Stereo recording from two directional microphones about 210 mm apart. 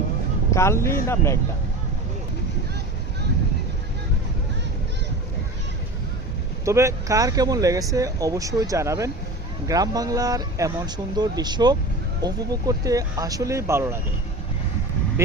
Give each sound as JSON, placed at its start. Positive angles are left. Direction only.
{"t": 0.5, "sound": "speech", "side_deg": 10}
{"t": 6.7, "sound": "speech", "side_deg": -15}